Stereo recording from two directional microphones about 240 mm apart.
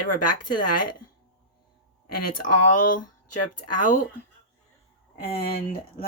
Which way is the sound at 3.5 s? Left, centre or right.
Left.